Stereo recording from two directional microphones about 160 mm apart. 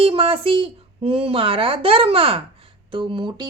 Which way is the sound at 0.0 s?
35° right (ahead or behind).